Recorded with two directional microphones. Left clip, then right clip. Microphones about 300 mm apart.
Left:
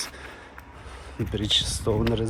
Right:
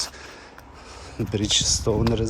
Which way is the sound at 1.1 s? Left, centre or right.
Centre.